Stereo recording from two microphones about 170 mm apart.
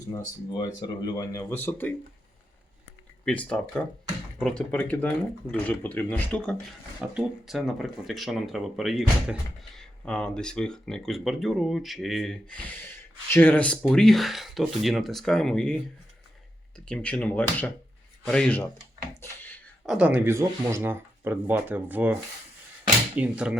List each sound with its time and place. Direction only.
0.1 s speech: 25° left (ahead or behind)
3.2 s speech: 5° left (ahead or behind)
19.1 s a sound: 15° left (ahead or behind)
19.8 s speech: 5° right (ahead or behind)